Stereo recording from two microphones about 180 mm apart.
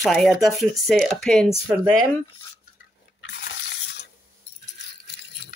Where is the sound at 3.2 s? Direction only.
70° left (ahead or behind).